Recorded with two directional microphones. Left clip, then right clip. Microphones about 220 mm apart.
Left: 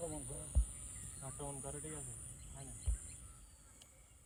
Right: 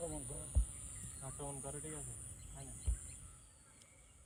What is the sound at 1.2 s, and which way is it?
Speech, 50° right (ahead or behind).